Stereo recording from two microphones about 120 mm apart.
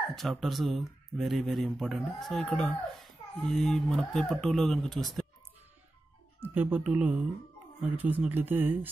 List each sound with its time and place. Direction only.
0.1 s speech: centre (ahead or behind)
6.4 s speech: 15° right (ahead or behind)